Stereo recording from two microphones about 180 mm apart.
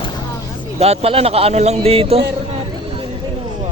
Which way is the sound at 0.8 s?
35° right (ahead or behind).